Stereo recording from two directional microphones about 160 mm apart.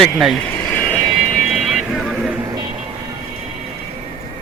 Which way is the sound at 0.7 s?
10° left (ahead or behind).